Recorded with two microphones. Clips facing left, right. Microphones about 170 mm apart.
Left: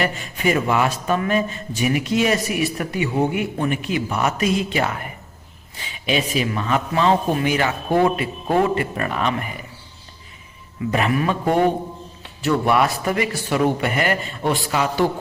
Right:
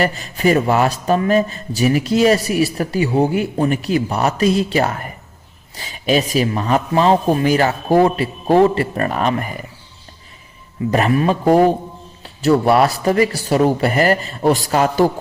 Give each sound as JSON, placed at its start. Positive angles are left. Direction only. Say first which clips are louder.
{"t": 0.0, "sound": "a man's voice", "louder": "right 5 dB", "side_deg": -35}
{"t": 10.9, "sound": "a man's voice", "louder": "right 5 dB", "side_deg": -35}